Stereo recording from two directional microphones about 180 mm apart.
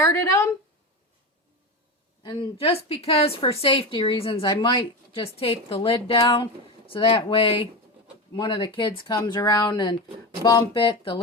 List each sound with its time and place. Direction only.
0.0 s a woman's voice: 15° left (ahead or behind)
2.2 s a woman's voice: 25° left (ahead or behind)